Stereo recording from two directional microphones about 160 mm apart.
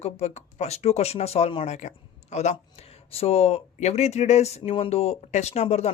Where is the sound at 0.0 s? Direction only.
45° left (ahead or behind).